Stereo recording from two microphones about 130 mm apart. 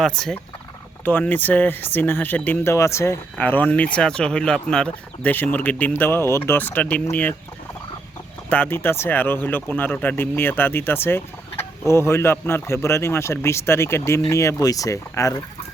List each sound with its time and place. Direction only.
0.0 s speech: 5° left (ahead or behind)
1.0 s speech: 15° left (ahead or behind)
8.4 s speech: 15° left (ahead or behind)